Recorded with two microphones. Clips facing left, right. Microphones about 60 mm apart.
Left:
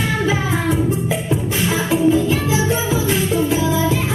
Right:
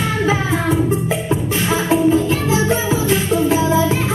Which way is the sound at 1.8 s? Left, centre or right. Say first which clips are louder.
Right 1 dB; right.